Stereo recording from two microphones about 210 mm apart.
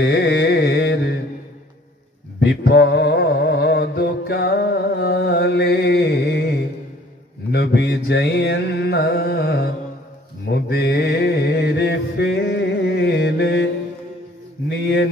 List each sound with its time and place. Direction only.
0.0 s carnatic music: 55° left (ahead or behind)
2.4 s music: 50° left (ahead or behind)
7.5 s carnatic music: 50° left (ahead or behind)
10.4 s mantra: 50° left (ahead or behind)
14.7 s a sound: 55° left (ahead or behind)